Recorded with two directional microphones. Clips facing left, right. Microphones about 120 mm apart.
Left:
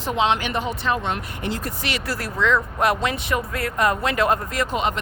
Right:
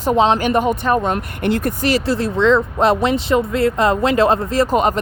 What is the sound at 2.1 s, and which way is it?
Speech, 25° right (ahead or behind).